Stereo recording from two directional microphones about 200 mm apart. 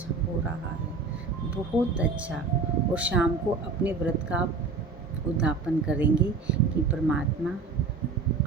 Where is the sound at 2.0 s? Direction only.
5° right (ahead or behind).